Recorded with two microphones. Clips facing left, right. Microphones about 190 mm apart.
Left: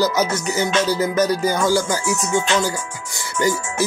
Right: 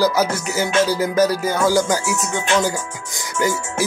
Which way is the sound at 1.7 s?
15° right (ahead or behind).